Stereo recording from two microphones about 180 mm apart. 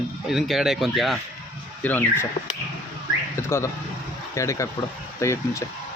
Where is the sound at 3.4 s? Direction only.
15° left (ahead or behind).